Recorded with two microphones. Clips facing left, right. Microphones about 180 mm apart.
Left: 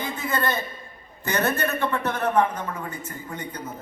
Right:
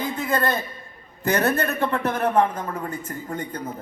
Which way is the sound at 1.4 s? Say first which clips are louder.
Even; 35° right (ahead or behind).